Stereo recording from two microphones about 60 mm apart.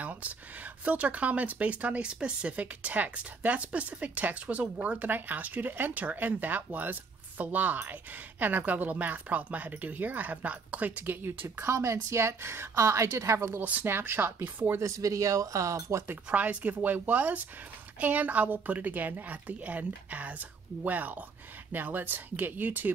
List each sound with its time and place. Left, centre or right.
0.8 s speech: right
11.6 s a woman's voice: right
13.6 s speech: right
13.8 s speech: right
14.8 s a woman's voice: right
16.3 s speech: right